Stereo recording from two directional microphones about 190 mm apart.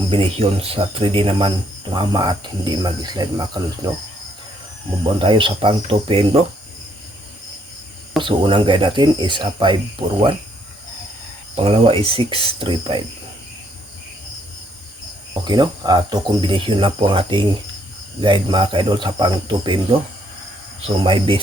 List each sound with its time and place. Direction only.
0.1 s speech: 30° right (ahead or behind)
5.2 s speech: 25° right (ahead or behind)
8.2 s speech: 25° right (ahead or behind)
11.5 s speech: 30° right (ahead or behind)
15.3 s speech: 25° right (ahead or behind)